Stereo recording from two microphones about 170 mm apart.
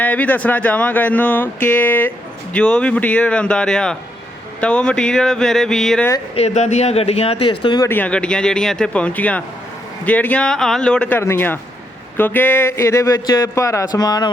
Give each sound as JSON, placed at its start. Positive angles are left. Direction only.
{"t": 0.0, "sound": "speech", "side_deg": 10}
{"t": 6.3, "sound": "speech", "side_deg": 40}
{"t": 7.9, "sound": "speech", "side_deg": 10}